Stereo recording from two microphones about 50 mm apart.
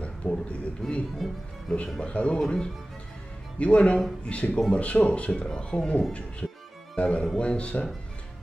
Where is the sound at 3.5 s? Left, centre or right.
Left.